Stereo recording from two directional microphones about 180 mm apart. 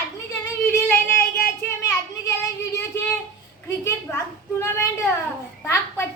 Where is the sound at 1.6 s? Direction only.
15° left (ahead or behind).